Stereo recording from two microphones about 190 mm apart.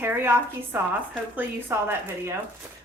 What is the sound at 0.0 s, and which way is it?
A woman's voice, 10° right (ahead or behind).